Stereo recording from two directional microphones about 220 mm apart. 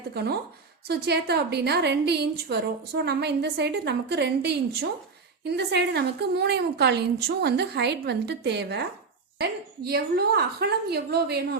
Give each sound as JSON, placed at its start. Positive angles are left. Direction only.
{"t": 0.1, "sound": "a woman's voice", "side_deg": -45}